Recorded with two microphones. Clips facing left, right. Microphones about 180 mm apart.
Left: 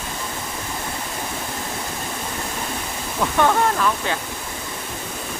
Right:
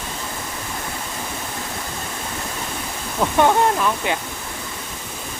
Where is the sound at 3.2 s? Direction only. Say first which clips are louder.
Right 2 dB; 15° right (ahead or behind).